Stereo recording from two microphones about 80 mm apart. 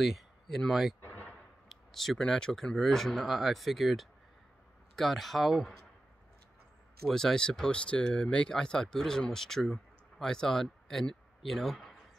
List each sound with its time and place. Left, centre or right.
0.0 s speech: centre
7.1 s speech: centre